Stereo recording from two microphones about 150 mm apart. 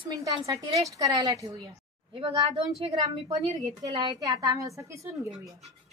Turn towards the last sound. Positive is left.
turn(degrees=-20)  # may be behind; listen again after turning